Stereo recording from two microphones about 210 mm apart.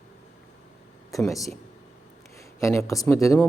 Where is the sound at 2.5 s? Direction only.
15° left (ahead or behind).